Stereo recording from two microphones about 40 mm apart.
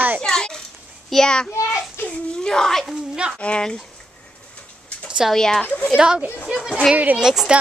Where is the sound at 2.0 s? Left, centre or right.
Left.